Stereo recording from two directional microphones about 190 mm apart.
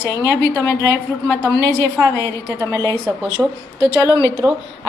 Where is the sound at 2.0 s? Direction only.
15° right (ahead or behind).